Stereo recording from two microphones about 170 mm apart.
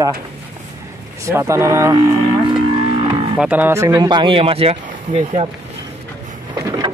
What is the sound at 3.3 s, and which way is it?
Speech, 5° right (ahead or behind).